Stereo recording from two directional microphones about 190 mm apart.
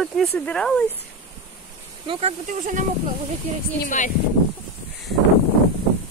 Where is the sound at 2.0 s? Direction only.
30° right (ahead or behind).